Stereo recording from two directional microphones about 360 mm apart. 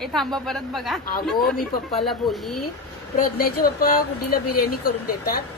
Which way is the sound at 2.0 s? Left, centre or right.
Centre.